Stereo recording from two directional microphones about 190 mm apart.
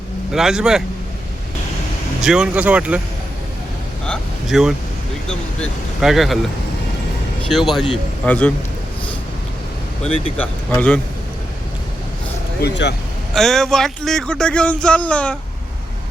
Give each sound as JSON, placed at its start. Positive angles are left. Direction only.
{"t": 0.3, "sound": "speech", "side_deg": -5}
{"t": 2.2, "sound": "speech", "side_deg": -5}
{"t": 4.0, "sound": "vehicle", "side_deg": 0}
{"t": 5.3, "sound": "speech", "side_deg": 5}
{"t": 7.5, "sound": "speech", "side_deg": 0}
{"t": 10.3, "sound": "speech", "side_deg": 10}
{"t": 12.6, "sound": "speech", "side_deg": 65}
{"t": 13.3, "sound": "speech", "side_deg": 0}